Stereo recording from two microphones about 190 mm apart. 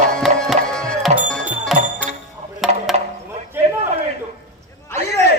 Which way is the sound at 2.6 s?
Centre (ahead or behind).